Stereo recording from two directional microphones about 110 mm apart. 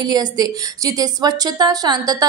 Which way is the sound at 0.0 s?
40° right (ahead or behind).